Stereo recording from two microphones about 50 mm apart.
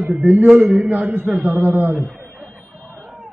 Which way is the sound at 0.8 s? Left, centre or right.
Right.